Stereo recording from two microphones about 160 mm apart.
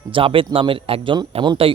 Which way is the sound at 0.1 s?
35° right (ahead or behind).